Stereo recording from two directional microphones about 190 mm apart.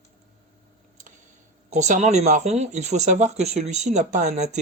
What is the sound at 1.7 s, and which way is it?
Speech, 40° right (ahead or behind).